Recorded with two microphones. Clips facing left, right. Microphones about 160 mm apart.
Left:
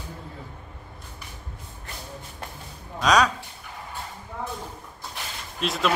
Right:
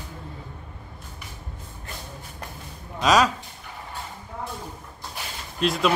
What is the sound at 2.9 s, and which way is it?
Speech, centre (ahead or behind).